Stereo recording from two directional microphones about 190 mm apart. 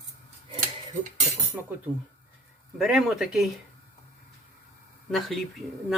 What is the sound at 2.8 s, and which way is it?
Speech, centre (ahead or behind).